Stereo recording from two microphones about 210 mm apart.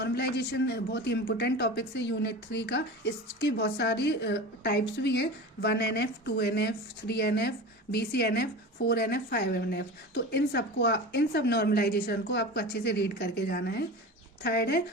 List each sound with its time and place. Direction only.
0.0 s a man's voice: 50° left (ahead or behind)